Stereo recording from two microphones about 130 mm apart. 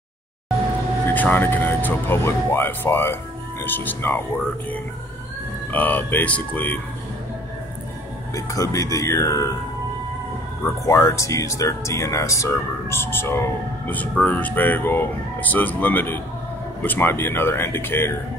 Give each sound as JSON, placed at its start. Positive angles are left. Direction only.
{"t": 1.0, "sound": "speech", "side_deg": 15}
{"t": 5.7, "sound": "speech", "side_deg": 15}
{"t": 8.4, "sound": "speech", "side_deg": 25}
{"t": 10.9, "sound": "speech", "side_deg": 20}